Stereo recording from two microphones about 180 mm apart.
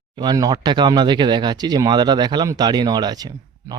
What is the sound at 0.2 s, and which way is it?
Speech, 20° right (ahead or behind).